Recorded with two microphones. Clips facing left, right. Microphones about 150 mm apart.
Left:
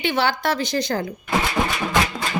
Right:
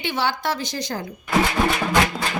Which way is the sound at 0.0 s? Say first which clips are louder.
Left 3 dB; 70° left (ahead or behind).